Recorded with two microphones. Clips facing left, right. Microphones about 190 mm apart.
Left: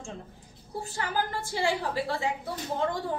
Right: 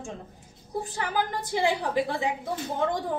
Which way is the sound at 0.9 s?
20° right (ahead or behind).